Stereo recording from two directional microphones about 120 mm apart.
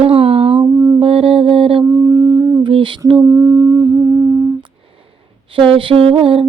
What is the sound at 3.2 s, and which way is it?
Humming, 30° right (ahead or behind).